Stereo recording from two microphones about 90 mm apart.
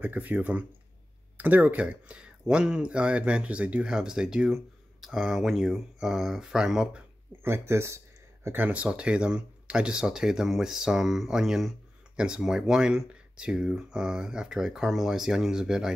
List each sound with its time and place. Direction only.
0.0 s speech: 20° right (ahead or behind)
7.4 s speech: 30° right (ahead or behind)
8.5 s speech: 20° right (ahead or behind)